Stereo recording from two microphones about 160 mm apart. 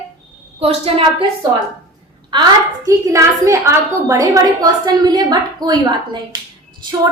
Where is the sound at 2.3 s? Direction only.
25° right (ahead or behind).